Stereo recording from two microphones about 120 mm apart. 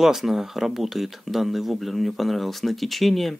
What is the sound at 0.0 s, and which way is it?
Speech, centre (ahead or behind).